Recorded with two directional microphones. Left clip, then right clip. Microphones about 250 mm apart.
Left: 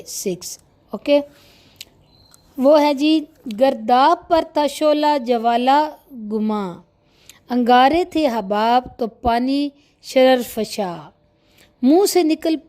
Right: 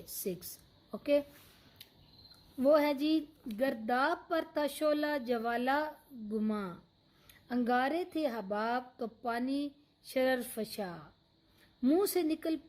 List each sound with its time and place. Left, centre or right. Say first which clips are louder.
0.0 s a woman's voice: left 15 dB; left
1.8 s cricket: left 17 dB; left
2.6 s a woman's voice: left 14 dB; left